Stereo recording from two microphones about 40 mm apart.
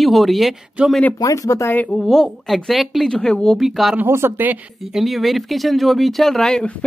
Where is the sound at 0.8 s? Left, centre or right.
Right.